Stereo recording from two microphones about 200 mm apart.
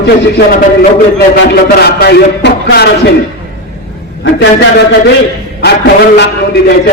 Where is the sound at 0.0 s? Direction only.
55° left (ahead or behind).